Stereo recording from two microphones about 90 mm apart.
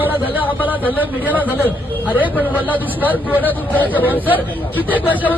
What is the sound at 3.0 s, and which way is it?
Speech, 20° right (ahead or behind).